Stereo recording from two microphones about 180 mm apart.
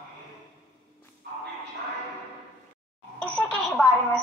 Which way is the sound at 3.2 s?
5° left (ahead or behind).